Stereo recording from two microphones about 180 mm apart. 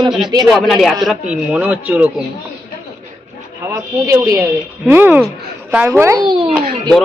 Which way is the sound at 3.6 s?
15° right (ahead or behind).